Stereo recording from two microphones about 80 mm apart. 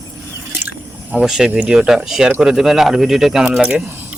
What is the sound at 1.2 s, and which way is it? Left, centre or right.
Speech, centre.